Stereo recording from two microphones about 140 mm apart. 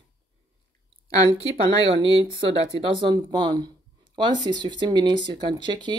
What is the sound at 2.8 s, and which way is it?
Speech, 30° right (ahead or behind).